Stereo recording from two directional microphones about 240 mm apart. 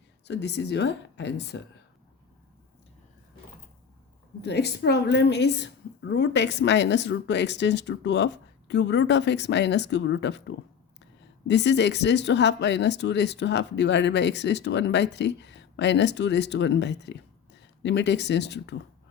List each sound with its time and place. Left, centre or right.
0.3 s speech: left
4.4 s speech: left